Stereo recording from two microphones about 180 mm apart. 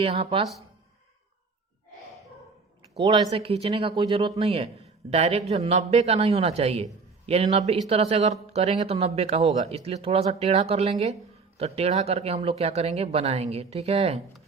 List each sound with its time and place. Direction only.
0.0 s speech: 30° right (ahead or behind)
3.0 s speech: 25° right (ahead or behind)